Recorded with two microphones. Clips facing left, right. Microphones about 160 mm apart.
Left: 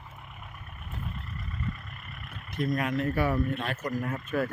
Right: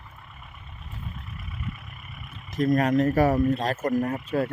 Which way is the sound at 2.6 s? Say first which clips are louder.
Right 7 dB; 45° right (ahead or behind).